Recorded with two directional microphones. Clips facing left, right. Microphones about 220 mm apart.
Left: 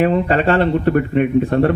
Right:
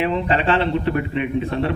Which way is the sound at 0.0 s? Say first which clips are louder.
Left 5 dB; 45° left (ahead or behind).